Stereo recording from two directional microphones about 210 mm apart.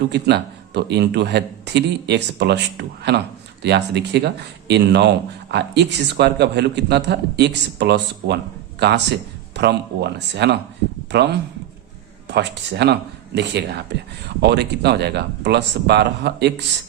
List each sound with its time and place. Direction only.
0.1 s speech: 55° right (ahead or behind)